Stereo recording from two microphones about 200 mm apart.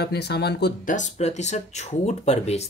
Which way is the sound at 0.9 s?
35° left (ahead or behind).